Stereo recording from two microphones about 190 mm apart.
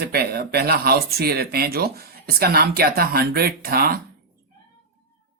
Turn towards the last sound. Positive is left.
turn(degrees=-55)  # may be behind; listen again after turning